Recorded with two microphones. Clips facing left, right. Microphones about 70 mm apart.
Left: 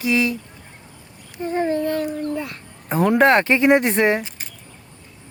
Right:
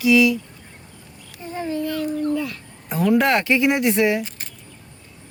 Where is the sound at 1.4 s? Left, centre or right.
Left.